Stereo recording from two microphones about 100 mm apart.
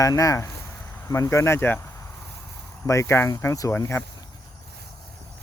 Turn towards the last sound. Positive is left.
turn(degrees=25)  # may be behind; listen again after turning